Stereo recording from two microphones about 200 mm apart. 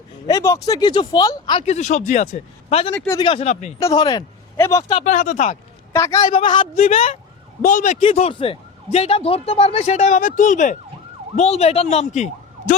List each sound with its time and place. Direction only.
0.3 s speech: 15° left (ahead or behind); by 2.9 s 30° left (ahead or behind)
2.9 s speech: 10° left (ahead or behind)
3.2 s speech: 30° left (ahead or behind)
3.8 s speech: 15° left (ahead or behind)
5.0 s speech: 40° left (ahead or behind)
5.9 s speech: 15° left (ahead or behind)
6.3 s speech: 25° left (ahead or behind)